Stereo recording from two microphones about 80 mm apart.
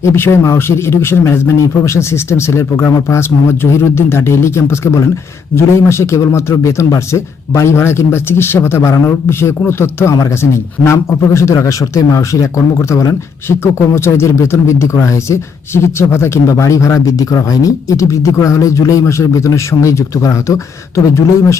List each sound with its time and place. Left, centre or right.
0.0 s a man's voice: left
13.6 s speech: left